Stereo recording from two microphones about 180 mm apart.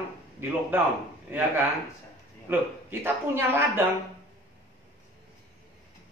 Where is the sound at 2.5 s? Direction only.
10° right (ahead or behind).